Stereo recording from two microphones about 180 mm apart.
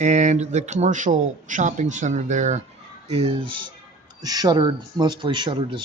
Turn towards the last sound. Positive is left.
turn(degrees=-25)  # may be behind; listen again after turning